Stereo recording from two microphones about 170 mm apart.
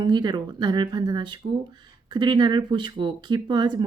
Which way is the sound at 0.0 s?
25° right (ahead or behind).